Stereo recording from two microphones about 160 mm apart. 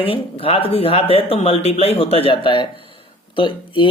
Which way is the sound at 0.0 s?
35° left (ahead or behind).